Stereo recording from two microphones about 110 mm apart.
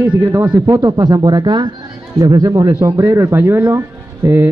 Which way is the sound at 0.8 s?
35° right (ahead or behind).